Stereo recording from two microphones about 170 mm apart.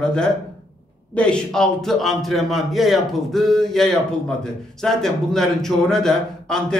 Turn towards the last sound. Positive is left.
turn(degrees=5)  # may be behind; listen again after turning